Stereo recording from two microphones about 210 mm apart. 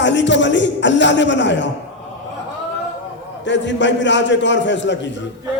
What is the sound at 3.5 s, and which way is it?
A man's voice, 60° left (ahead or behind).